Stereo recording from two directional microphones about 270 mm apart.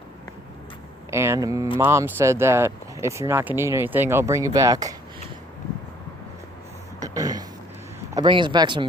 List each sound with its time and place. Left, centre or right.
1.1 s speech: centre
7.0 s a sound: centre
8.1 s speech: centre